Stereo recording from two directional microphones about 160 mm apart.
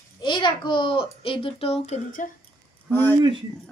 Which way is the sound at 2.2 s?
55° left (ahead or behind).